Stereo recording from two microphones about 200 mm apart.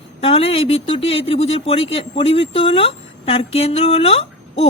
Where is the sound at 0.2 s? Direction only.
30° left (ahead or behind).